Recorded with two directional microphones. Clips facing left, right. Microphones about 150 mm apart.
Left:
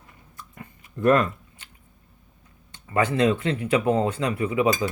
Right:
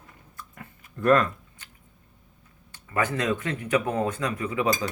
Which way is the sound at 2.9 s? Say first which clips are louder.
Left 5 dB; 30° left (ahead or behind).